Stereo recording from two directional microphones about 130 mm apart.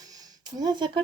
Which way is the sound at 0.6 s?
35° right (ahead or behind).